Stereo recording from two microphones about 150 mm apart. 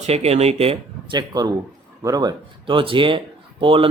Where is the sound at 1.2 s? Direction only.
25° right (ahead or behind).